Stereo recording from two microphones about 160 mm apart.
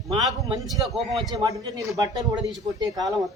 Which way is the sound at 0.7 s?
Centre (ahead or behind).